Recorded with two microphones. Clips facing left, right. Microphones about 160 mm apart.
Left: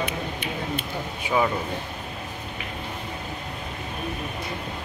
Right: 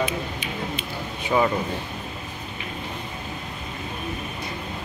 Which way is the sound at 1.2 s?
10° left (ahead or behind).